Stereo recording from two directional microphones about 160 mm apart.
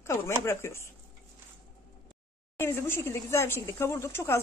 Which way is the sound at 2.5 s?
15° left (ahead or behind).